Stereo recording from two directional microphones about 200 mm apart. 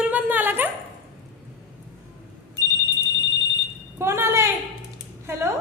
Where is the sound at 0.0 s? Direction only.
10° right (ahead or behind).